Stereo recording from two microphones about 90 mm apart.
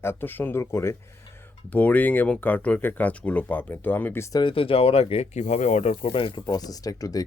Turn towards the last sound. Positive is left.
turn(degrees=45)  # may be behind; listen again after turning